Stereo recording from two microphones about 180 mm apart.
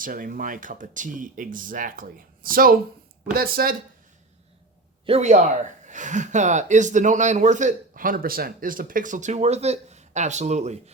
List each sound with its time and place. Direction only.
0.0 s speech: 50° right (ahead or behind)
5.0 s speech: 35° right (ahead or behind)